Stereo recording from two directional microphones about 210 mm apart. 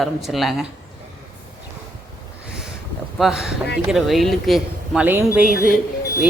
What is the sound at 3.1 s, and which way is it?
Speech, centre (ahead or behind).